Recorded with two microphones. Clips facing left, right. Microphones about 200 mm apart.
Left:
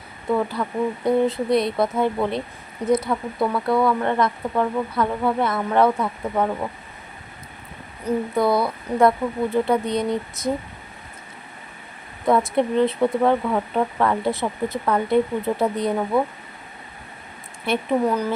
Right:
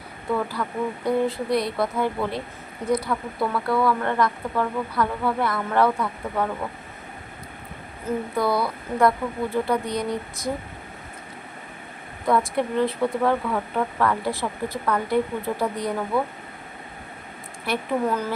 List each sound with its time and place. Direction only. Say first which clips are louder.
0.3 s speech: left 3 dB; 20° left (ahead or behind)
8.0 s speech: left 4 dB; 20° left (ahead or behind)
12.2 s speech: left 3 dB; 25° left (ahead or behind)
17.7 s speech: left 3 dB; 20° left (ahead or behind)